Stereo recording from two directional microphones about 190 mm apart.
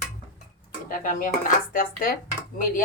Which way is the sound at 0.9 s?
45° left (ahead or behind).